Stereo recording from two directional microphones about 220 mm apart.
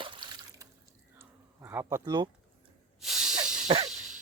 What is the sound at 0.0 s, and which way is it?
Water, 20° right (ahead or behind).